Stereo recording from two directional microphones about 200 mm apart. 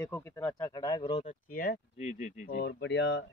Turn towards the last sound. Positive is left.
turn(degrees=60)  # may be behind; listen again after turning